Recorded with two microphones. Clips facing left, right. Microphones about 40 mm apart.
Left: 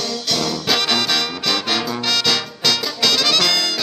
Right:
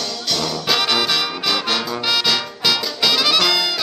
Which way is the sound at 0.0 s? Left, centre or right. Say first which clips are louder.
Left 1 dB; centre.